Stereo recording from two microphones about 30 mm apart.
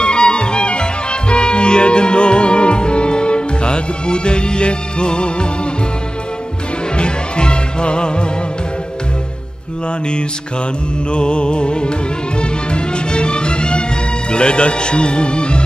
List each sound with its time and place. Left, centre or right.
0.0 s music: left
7.0 s music: left
11.1 s music: left
14.3 s speech: left